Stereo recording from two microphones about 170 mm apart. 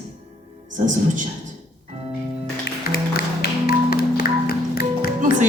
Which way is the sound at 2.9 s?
70° left (ahead or behind).